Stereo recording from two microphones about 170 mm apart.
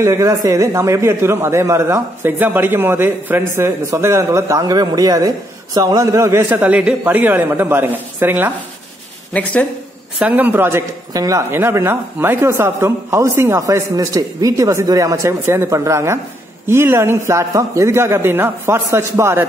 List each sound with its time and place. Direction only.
0.0 s speech: 15° right (ahead or behind)
9.3 s speech: 5° left (ahead or behind)
10.1 s speech: 10° right (ahead or behind)